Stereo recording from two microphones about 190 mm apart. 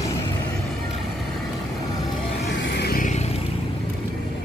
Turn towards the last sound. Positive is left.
turn(degrees=40)  # may be behind; listen again after turning